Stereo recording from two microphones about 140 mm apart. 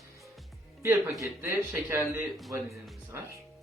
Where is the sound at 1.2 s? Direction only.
20° right (ahead or behind).